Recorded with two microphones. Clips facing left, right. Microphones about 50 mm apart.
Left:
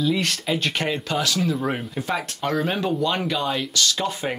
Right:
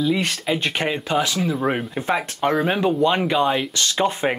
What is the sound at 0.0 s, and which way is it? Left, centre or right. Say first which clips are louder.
Speech: right 2 dB; centre.